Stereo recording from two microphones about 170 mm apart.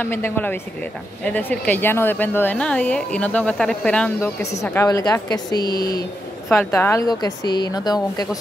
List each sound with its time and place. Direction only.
0.0 s a woman's voice: 10° left (ahead or behind)